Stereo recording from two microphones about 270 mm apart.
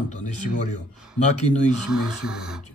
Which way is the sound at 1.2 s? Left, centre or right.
Left.